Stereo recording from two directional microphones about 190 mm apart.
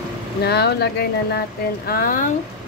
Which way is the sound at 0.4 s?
60° left (ahead or behind).